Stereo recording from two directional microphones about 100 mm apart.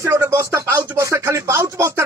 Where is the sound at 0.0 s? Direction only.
25° right (ahead or behind).